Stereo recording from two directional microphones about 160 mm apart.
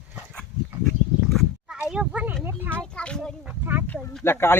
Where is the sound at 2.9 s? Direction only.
5° left (ahead or behind).